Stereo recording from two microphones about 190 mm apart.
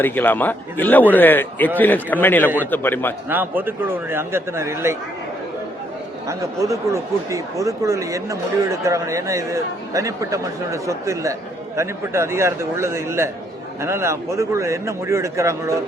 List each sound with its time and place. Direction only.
0.0 s a man's voice: 10° left (ahead or behind)
3.2 s speech: 10° right (ahead or behind)
6.2 s speech: 15° right (ahead or behind)